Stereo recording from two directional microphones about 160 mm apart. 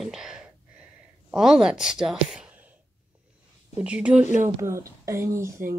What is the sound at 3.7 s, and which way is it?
Speech, 5° right (ahead or behind).